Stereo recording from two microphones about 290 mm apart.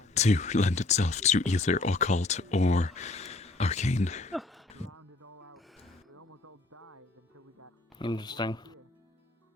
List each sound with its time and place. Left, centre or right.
0.0 s speech: left
4.4 s a sound: centre
4.9 s music: right
5.5 s music: centre
6.1 s music: right
7.9 s speech: centre